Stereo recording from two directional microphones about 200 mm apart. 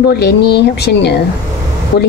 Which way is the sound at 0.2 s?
55° left (ahead or behind).